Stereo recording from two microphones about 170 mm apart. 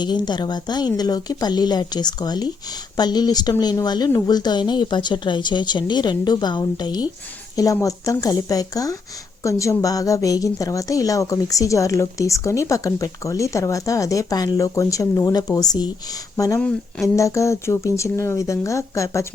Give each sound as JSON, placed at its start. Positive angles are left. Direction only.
{"t": 0.0, "sound": "a woman's voice", "side_deg": 25}
{"t": 16.6, "sound": "speech", "side_deg": 5}
{"t": 17.2, "sound": "speech", "side_deg": 15}